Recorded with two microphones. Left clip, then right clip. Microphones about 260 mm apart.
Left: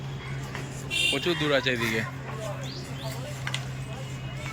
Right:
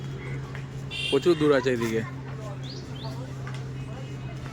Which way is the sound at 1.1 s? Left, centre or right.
Centre.